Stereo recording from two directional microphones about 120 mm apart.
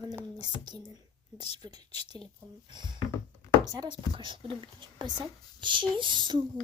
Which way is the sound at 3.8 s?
45° right (ahead or behind).